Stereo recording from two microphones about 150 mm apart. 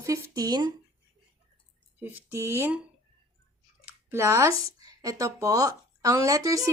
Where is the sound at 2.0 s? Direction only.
15° right (ahead or behind).